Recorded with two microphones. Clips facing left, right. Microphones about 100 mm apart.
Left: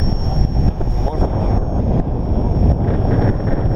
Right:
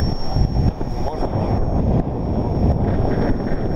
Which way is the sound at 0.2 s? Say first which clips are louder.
Left 2 dB; 50° left (ahead or behind).